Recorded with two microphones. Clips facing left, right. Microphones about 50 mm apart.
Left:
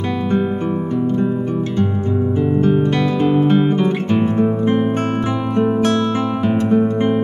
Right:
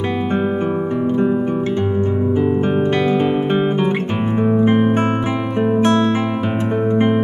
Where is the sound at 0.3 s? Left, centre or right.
Right.